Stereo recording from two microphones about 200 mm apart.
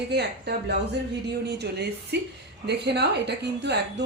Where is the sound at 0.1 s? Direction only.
55° right (ahead or behind).